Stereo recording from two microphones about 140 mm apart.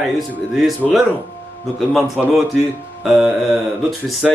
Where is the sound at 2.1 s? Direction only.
Centre (ahead or behind).